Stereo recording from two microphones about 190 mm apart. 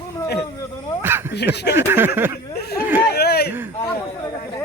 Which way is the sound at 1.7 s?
10° right (ahead or behind).